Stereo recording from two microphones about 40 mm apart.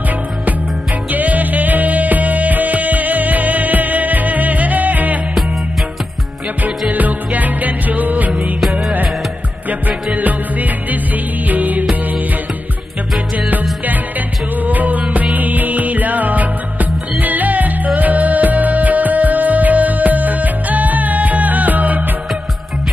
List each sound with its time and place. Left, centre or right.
1.1 s music: right
6.9 s music: right
10.1 s music: right
13.5 s music: right